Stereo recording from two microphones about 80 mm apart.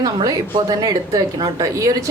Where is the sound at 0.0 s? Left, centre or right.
Right.